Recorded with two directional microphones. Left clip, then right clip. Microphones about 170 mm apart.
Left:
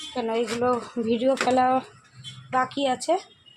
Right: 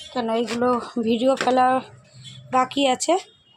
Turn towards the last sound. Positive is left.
turn(degrees=-35)  # may be behind; listen again after turning